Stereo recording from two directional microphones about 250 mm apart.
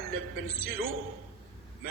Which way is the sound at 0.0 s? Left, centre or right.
Right.